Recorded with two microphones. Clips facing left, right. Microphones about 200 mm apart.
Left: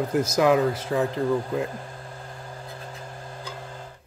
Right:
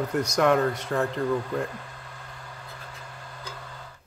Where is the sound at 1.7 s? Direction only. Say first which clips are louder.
Left 4 dB; 30° left (ahead or behind).